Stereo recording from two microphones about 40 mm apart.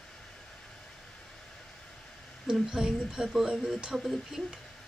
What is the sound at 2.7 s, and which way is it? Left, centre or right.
Speech, centre.